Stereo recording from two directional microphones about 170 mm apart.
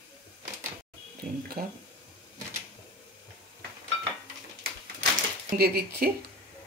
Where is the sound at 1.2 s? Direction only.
60° right (ahead or behind).